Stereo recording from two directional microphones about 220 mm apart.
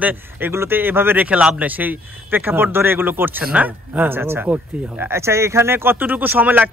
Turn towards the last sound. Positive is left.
turn(degrees=-10)  # may be behind; listen again after turning